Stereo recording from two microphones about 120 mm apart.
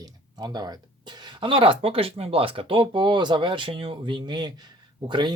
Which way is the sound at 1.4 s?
45° right (ahead or behind).